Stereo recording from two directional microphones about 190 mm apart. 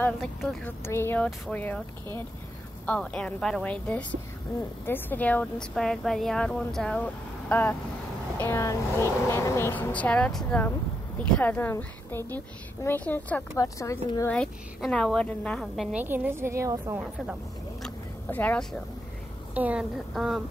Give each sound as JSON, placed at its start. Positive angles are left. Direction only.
{"t": 0.2, "sound": "a woman's voice", "side_deg": 0}
{"t": 0.7, "sound": "speech", "side_deg": 15}
{"t": 2.9, "sound": "a woman's voice", "side_deg": 5}
{"t": 14.3, "sound": "a woman's voice", "side_deg": 5}
{"t": 17.8, "sound": "a sound", "side_deg": 10}
{"t": 19.5, "sound": "a woman's voice", "side_deg": -5}